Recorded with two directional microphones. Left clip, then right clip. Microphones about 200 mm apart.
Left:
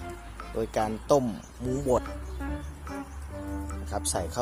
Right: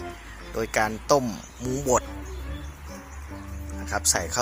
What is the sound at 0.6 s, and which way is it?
Speech, 10° left (ahead or behind).